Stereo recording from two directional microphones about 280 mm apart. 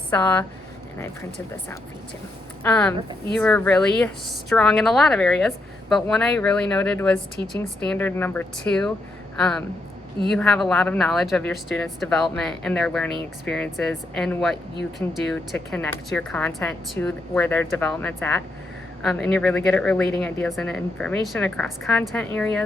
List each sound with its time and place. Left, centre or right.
0.1 s a woman's voice: centre
2.6 s a woman's voice: centre